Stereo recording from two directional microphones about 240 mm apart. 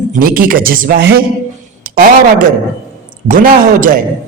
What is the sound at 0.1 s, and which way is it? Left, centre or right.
Speech, right.